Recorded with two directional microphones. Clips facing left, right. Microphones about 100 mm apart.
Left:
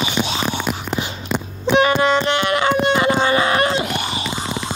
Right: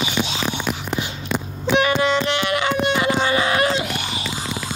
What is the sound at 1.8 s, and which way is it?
Music, 40° left (ahead or behind).